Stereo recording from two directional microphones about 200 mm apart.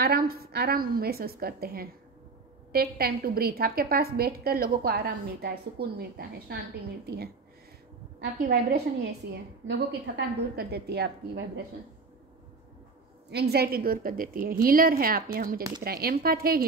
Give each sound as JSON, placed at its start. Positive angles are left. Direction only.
{"t": 0.0, "sound": "a woman's voice", "side_deg": -50}
{"t": 13.3, "sound": "a woman's voice", "side_deg": -55}